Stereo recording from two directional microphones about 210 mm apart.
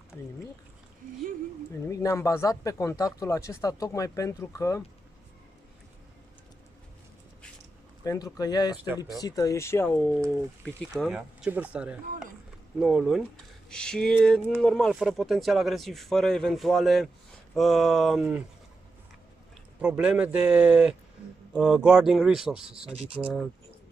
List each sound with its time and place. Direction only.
1.9 s speech: 15° left (ahead or behind)
8.0 s speech: 15° left (ahead or behind); by 18.4 s centre (ahead or behind)
19.8 s speech: 5° right (ahead or behind)